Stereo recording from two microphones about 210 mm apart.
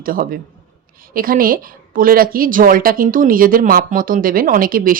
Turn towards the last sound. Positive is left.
turn(degrees=-40)  # may be behind; listen again after turning